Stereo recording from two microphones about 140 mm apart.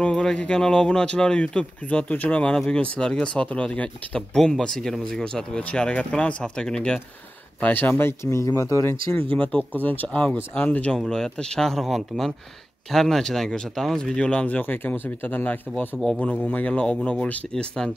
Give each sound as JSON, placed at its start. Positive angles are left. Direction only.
{"t": 0.0, "sound": "speech", "side_deg": 5}